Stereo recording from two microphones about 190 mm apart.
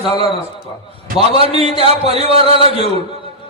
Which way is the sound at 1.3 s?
30° right (ahead or behind).